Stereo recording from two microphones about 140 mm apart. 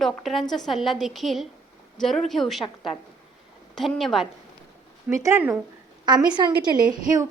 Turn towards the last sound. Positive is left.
turn(degrees=-30)  # may be behind; listen again after turning